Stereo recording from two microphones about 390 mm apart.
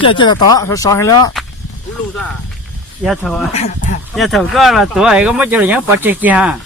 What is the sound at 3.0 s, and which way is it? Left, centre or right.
Speech, centre.